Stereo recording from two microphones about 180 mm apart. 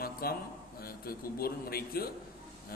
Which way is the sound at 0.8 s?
55° left (ahead or behind).